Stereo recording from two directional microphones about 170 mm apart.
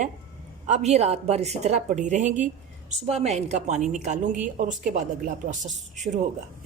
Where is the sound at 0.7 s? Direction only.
40° right (ahead or behind).